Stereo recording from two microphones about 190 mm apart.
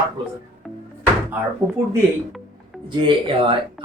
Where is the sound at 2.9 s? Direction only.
25° right (ahead or behind).